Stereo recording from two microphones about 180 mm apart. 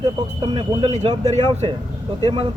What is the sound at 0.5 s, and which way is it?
Speech, 30° right (ahead or behind).